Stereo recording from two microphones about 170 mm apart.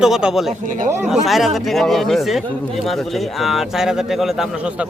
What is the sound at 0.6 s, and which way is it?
Speech, 50° right (ahead or behind).